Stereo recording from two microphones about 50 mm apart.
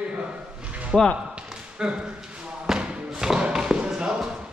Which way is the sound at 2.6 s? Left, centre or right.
Centre.